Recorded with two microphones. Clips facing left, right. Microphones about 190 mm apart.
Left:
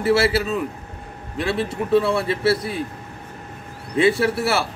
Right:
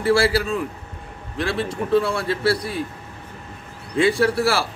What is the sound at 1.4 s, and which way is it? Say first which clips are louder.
A man's voice: left 1 dB; 5° left (ahead or behind).